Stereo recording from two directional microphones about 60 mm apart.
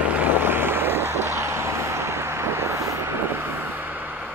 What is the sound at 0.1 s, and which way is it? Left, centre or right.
Vehicle, right.